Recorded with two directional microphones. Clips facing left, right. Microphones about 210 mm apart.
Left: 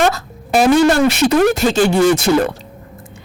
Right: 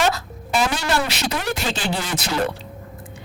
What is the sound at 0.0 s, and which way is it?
Speech, 50° left (ahead or behind).